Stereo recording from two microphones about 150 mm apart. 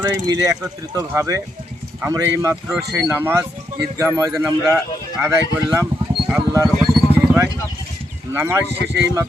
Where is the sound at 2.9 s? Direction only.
15° right (ahead or behind).